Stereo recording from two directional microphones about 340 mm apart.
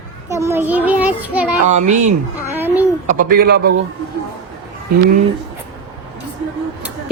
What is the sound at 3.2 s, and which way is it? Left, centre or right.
Speech, right.